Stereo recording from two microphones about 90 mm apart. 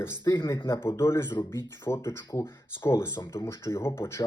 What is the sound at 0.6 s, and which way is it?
Speech, 35° left (ahead or behind).